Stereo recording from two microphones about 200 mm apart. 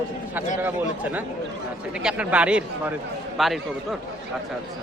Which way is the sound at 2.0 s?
5° right (ahead or behind).